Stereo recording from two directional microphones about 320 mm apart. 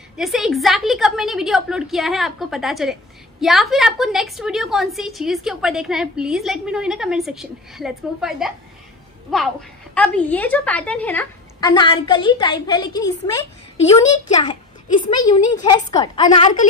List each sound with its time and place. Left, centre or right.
0.2 s a woman's voice: centre
16.3 s a woman's voice: left